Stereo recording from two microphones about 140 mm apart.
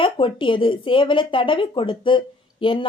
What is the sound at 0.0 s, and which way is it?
Speech, 35° left (ahead or behind).